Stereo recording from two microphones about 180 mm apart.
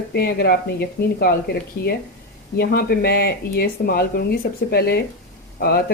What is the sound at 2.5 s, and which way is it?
A woman's voice, 55° left (ahead or behind).